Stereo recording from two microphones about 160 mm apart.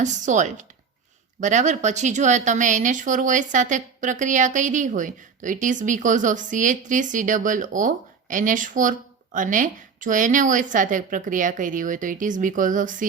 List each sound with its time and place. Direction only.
0.0 s speech: 50° right (ahead or behind)